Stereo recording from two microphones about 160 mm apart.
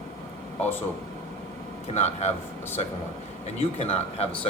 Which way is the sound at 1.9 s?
45° left (ahead or behind).